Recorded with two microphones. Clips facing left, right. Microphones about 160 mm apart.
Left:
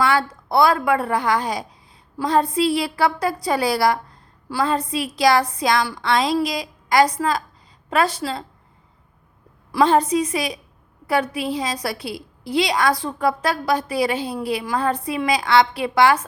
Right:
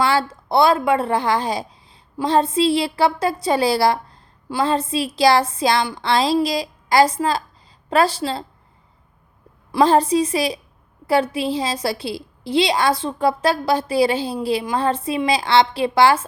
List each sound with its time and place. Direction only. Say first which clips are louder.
0.0 s a woman's voice: right 1 dB; 30° right (ahead or behind)
9.7 s a woman's voice: right 2 dB; 30° right (ahead or behind)